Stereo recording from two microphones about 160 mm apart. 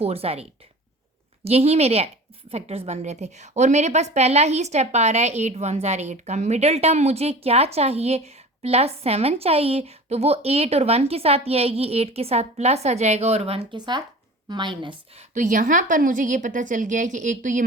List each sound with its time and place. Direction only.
0.0 s a woman's voice: 40° right (ahead or behind)
1.5 s a woman's voice: 40° right (ahead or behind)
15.4 s a woman's voice: 50° right (ahead or behind)